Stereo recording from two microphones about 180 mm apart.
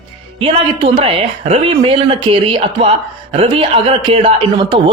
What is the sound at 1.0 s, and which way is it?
Speech, 30° right (ahead or behind).